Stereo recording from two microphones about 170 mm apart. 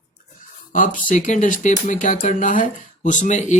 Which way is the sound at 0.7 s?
50° left (ahead or behind).